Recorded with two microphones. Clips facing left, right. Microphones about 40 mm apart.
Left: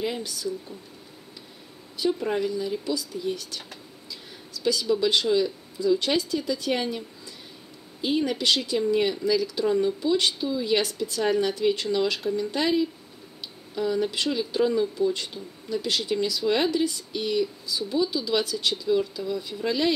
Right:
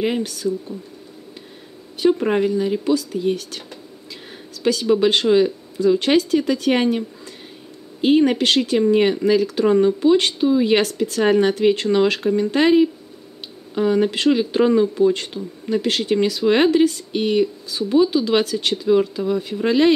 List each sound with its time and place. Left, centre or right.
0.0 s speech: right
2.0 s speech: right
4.6 s speech: right
8.0 s speech: right
18.8 s speech: right